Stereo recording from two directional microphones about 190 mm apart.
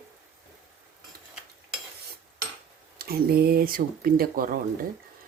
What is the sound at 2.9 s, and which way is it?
Speech, 55° right (ahead or behind).